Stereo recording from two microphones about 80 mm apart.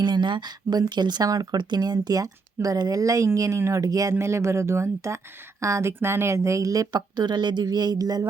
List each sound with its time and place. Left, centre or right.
0.0 s a woman's voice: right
6.9 s speech: right